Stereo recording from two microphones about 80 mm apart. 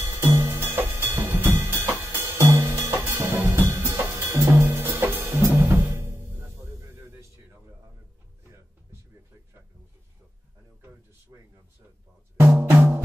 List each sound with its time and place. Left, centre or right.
0.0 s music: right
0.7 s drum kit: right
3.8 s music: right
12.4 s drum: right